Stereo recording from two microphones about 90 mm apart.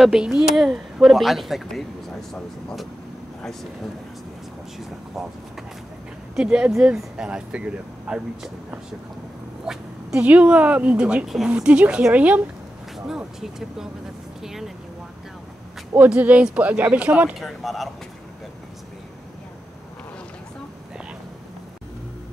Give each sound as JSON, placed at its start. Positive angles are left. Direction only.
{"t": 0.0, "sound": "speech", "side_deg": -10}
{"t": 4.7, "sound": "speech", "side_deg": -5}
{"t": 6.7, "sound": "speech", "side_deg": -5}
{"t": 12.9, "sound": "speech", "side_deg": -5}
{"t": 14.4, "sound": "vehicle", "side_deg": -5}
{"t": 16.1, "sound": "speech", "side_deg": -15}
{"t": 17.4, "sound": "speech", "side_deg": 0}